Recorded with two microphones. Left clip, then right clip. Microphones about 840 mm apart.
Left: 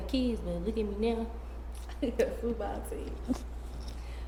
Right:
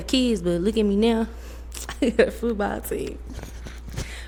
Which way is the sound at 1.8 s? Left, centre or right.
Right.